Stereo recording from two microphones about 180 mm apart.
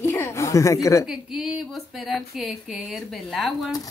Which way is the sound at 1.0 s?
5° right (ahead or behind).